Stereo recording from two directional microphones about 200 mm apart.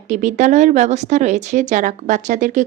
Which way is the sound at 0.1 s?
40° right (ahead or behind).